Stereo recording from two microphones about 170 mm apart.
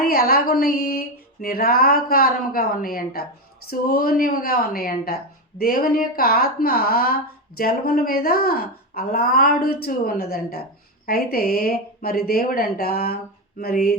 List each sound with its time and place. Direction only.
0.1 s a woman's voice: 65° left (ahead or behind)